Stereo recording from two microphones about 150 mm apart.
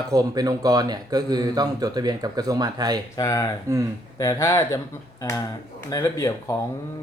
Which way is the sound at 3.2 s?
25° left (ahead or behind).